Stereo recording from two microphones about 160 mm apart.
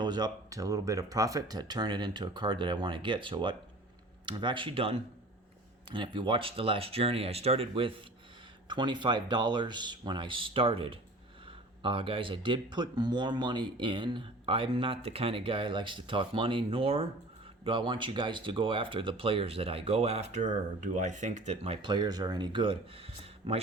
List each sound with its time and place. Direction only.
0.0 s speech: 25° right (ahead or behind)